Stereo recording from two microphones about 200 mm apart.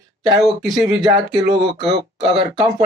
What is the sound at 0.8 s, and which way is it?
Speech, 20° right (ahead or behind).